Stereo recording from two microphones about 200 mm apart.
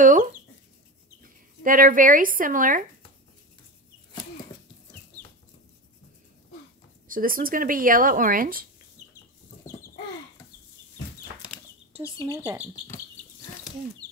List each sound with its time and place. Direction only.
0.0 s speech: 40° right (ahead or behind)
1.6 s speech: 45° right (ahead or behind)
7.1 s speech: 45° right (ahead or behind)
12.0 s speech: 15° left (ahead or behind)